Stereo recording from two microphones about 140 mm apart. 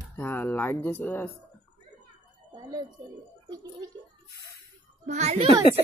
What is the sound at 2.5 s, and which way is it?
Speech, 30° right (ahead or behind).